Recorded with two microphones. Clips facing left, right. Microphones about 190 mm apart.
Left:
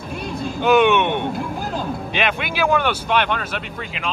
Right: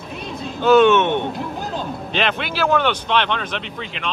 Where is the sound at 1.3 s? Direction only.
Centre (ahead or behind).